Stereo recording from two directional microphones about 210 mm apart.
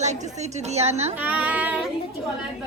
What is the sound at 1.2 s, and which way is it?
Speech, 5° right (ahead or behind).